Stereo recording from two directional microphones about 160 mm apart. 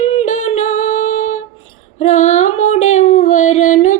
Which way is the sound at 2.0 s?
45° left (ahead or behind).